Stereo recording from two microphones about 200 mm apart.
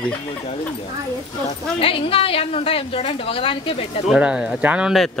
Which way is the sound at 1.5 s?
30° left (ahead or behind).